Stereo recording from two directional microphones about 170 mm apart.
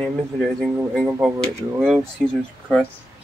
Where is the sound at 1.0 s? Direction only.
10° right (ahead or behind).